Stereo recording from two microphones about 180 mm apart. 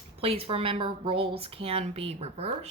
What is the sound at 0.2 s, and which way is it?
Speech, 30° right (ahead or behind).